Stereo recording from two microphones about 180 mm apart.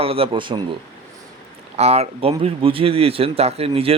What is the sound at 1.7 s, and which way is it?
Speech, 35° right (ahead or behind).